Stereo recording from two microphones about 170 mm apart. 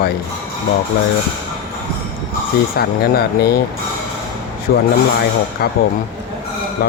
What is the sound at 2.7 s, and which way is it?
Speech, 65° left (ahead or behind).